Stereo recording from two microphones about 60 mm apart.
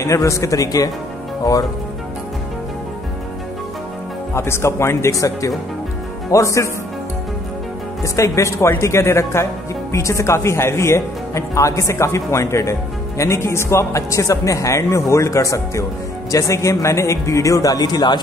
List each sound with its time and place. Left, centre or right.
0.0 s a man's voice: left
4.3 s a man's voice: left
8.0 s a man's voice: left